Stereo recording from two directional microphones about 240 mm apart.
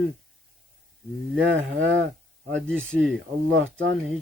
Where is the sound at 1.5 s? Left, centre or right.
Right.